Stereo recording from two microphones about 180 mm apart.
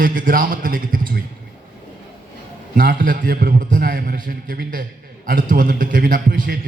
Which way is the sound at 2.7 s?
50° right (ahead or behind).